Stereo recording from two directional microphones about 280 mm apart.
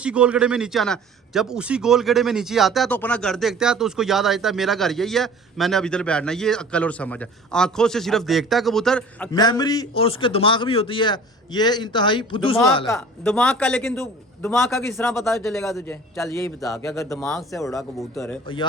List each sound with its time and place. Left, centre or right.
0.0 s a man's voice: centre
12.8 s a man's voice: centre
17.6 s speech: centre